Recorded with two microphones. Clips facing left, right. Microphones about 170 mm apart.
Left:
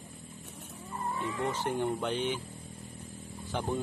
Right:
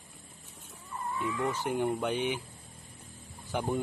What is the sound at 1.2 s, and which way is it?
Speech, 30° left (ahead or behind).